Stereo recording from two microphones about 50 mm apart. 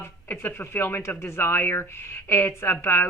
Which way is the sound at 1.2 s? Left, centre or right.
Left.